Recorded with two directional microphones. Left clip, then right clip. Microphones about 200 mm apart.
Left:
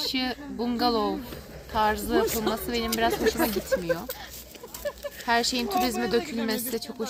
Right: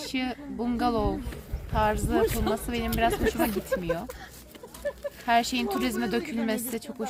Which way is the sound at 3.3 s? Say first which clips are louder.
Left 2 dB; 25° right (ahead or behind).